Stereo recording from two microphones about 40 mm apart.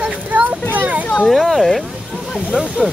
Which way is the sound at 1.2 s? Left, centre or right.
Centre.